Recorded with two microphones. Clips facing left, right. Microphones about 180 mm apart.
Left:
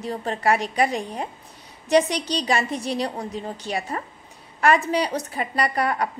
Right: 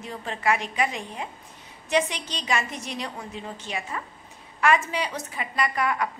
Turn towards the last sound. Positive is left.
turn(degrees=35)  # may be behind; listen again after turning